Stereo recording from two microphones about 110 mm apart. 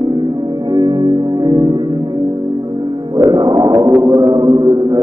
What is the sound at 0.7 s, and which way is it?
Music, 40° right (ahead or behind).